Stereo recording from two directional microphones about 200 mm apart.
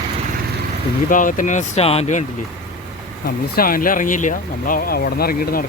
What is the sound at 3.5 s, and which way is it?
Speech, 45° left (ahead or behind).